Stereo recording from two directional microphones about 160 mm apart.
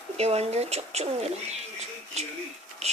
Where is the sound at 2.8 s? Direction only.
45° right (ahead or behind).